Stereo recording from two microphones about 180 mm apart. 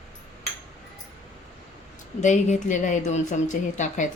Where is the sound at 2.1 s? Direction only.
40° left (ahead or behind).